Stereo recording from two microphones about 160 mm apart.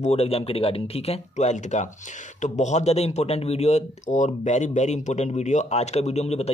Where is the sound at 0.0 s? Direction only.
40° left (ahead or behind).